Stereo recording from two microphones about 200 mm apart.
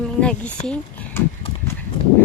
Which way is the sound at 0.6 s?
5° left (ahead or behind).